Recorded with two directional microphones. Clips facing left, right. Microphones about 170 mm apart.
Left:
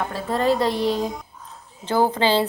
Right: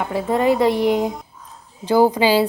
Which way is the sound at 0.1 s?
15° right (ahead or behind).